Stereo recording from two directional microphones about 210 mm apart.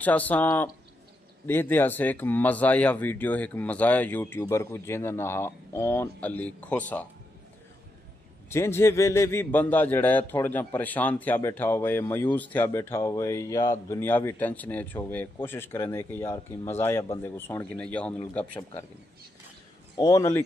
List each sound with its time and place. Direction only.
0.0 s speech: 10° left (ahead or behind)
8.5 s speech: 10° left (ahead or behind)
20.0 s speech: 15° left (ahead or behind)